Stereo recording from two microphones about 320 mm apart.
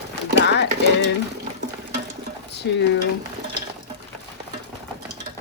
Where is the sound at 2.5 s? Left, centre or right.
Left.